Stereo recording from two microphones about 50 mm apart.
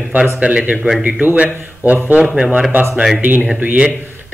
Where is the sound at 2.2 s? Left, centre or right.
Centre.